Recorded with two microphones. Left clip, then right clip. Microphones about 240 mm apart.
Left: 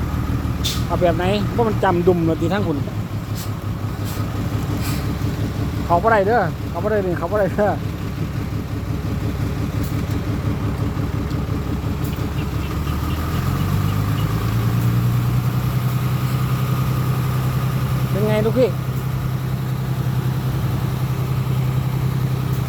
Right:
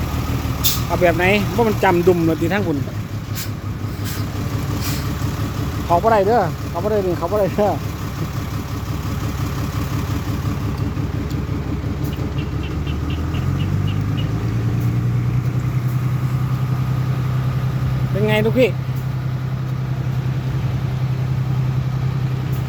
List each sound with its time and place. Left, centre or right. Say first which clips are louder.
1.0 s speech: right 4 dB; centre
5.9 s speech: right 1 dB; centre
18.3 s speech: right 2 dB; centre